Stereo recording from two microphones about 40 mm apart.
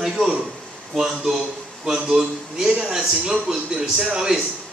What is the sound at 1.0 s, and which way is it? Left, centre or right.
A man's voice, centre.